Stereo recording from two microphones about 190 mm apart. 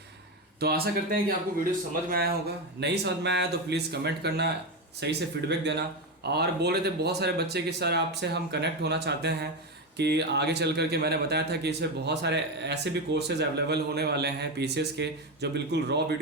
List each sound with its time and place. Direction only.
0.6 s speech: 55° right (ahead or behind)
2.8 s speech: 60° right (ahead or behind)